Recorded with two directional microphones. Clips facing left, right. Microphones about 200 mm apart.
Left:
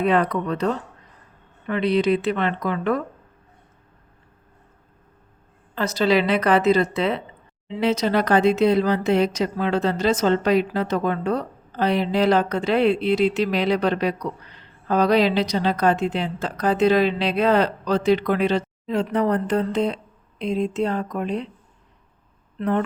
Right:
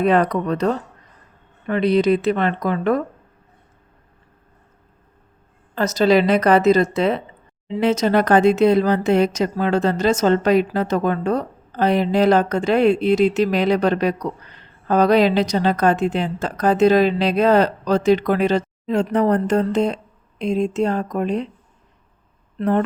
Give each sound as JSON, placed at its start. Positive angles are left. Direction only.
{"t": 0.0, "sound": "speech", "side_deg": -40}
{"t": 5.7, "sound": "speech", "side_deg": -45}
{"t": 22.5, "sound": "speech", "side_deg": -40}